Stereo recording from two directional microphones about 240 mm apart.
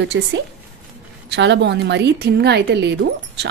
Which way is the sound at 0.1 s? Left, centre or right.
Right.